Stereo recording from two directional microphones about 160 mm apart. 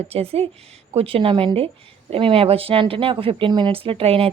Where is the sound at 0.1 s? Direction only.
40° right (ahead or behind).